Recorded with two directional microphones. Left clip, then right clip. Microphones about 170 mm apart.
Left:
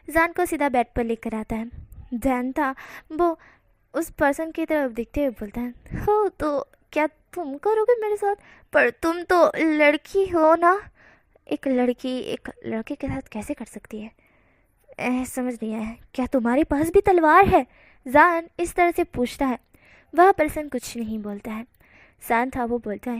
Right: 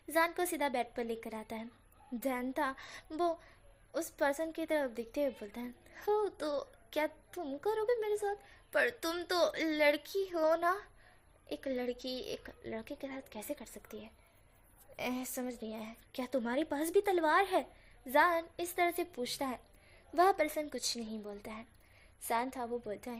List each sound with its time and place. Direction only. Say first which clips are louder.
0.1 s a woman's voice: left 11 dB; 35° left (ahead or behind)